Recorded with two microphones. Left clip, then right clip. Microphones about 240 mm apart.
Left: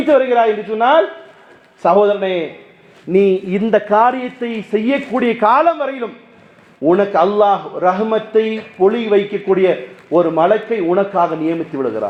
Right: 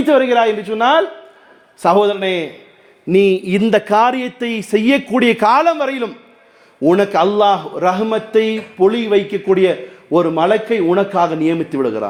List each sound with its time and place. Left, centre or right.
0.0 s a man's voice: right